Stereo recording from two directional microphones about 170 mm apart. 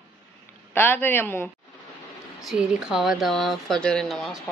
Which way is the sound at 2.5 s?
5° right (ahead or behind).